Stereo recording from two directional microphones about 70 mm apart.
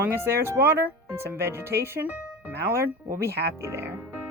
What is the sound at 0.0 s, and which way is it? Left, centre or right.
Speech, right.